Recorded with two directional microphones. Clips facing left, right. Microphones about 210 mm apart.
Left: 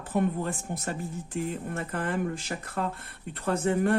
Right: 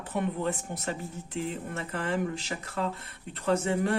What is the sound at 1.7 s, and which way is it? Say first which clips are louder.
Speech: right 1 dB; 50° left (ahead or behind).